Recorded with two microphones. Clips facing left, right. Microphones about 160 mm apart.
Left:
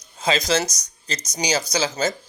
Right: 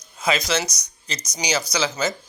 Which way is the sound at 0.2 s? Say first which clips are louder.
Left 2 dB; 35° left (ahead or behind).